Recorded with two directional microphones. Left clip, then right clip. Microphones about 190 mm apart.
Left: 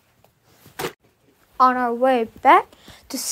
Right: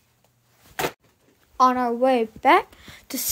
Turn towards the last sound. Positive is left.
turn(degrees=-5)  # may be behind; listen again after turning